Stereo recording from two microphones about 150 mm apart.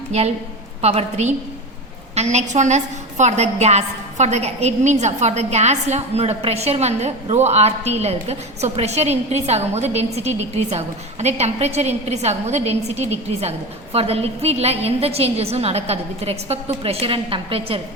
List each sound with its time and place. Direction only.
0.8 s a woman's voice: 45° right (ahead or behind)